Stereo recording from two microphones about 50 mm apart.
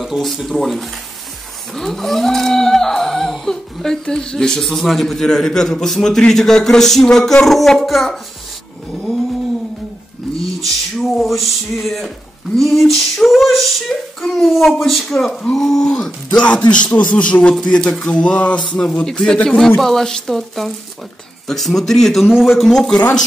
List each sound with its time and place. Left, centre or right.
0.2 s female singing: centre
1.7 s humming: centre
7.4 s female singing: centre
10.6 s female singing: centre
15.5 s humming: centre
16.3 s speech: left
18.6 s humming: centre
19.8 s female singing: centre
22.2 s speech: centre
22.6 s humming: centre